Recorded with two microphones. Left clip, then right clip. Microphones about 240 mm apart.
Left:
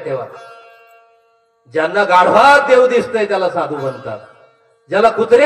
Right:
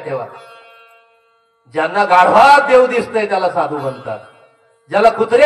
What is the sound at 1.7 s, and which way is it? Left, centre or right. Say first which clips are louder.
A man's voice: even; left.